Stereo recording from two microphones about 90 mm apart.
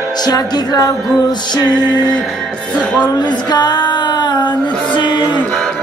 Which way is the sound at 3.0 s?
55° left (ahead or behind).